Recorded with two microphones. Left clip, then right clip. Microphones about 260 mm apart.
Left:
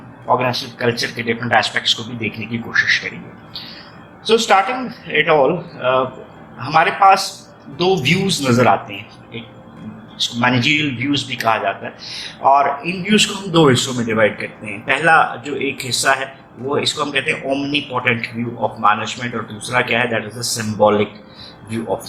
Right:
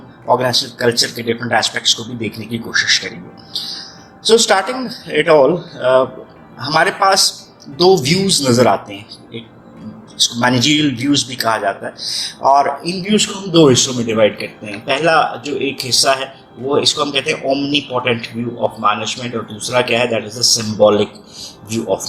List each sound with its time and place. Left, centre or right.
0.3 s speech: right
4.3 s speech: right
10.4 s speech: right